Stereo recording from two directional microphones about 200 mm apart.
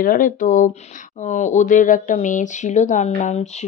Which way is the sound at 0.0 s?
45° left (ahead or behind).